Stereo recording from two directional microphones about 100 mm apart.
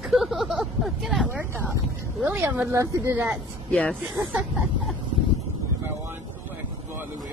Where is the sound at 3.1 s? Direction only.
20° right (ahead or behind).